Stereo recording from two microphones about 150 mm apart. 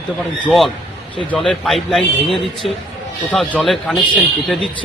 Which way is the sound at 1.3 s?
Centre (ahead or behind).